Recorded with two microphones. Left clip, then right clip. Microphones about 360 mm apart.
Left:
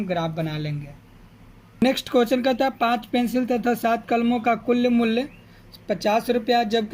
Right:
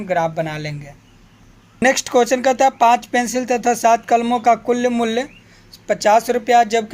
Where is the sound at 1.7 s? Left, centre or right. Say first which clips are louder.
Right 6 dB; centre.